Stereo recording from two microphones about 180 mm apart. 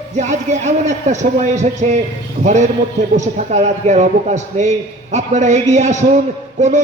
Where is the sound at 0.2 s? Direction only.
40° right (ahead or behind).